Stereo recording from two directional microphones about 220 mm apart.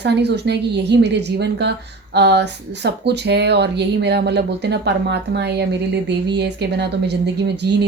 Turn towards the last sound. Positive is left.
turn(degrees=-50)  # may be behind; listen again after turning